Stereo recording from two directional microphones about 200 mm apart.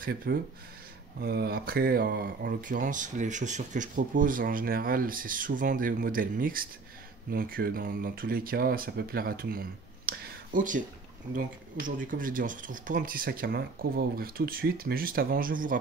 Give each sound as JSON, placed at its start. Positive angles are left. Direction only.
{"t": 0.0, "sound": "speech", "side_deg": -50}